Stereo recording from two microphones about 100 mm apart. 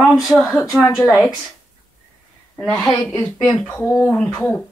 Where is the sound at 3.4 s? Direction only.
10° left (ahead or behind).